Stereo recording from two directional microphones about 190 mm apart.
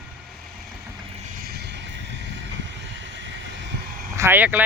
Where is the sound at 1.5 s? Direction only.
60° right (ahead or behind).